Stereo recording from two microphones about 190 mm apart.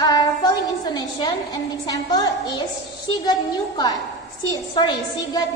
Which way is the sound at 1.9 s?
20° left (ahead or behind).